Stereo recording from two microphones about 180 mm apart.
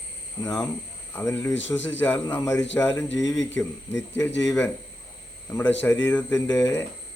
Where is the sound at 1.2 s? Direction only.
15° left (ahead or behind).